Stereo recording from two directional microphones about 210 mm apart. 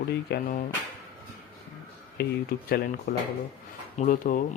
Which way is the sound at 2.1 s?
45° left (ahead or behind).